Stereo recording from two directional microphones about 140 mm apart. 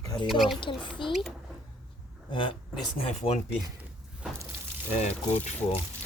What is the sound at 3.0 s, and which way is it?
Speech, 50° left (ahead or behind).